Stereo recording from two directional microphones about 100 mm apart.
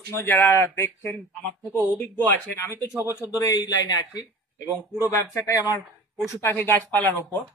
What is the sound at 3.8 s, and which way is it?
Speech, 45° left (ahead or behind).